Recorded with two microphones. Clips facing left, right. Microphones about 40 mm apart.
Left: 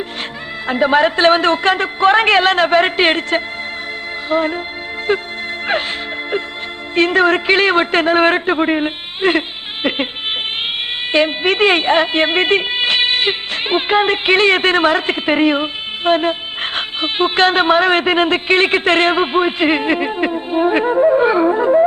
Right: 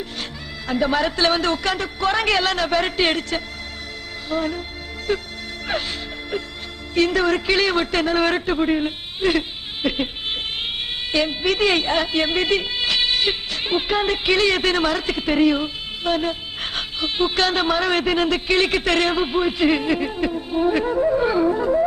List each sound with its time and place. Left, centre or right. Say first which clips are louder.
0.7 s a man's voice: left 7 dB; left
6.9 s a man's voice: left 5 dB; left
11.1 s a woman's voice: left 6 dB; left